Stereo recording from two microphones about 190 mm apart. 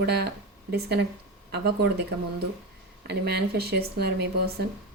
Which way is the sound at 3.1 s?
55° right (ahead or behind).